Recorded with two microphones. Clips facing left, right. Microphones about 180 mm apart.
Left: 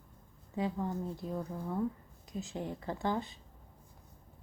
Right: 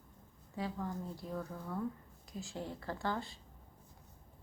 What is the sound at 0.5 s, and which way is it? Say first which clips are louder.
A woman's voice: left 5 dB; 20° left (ahead or behind).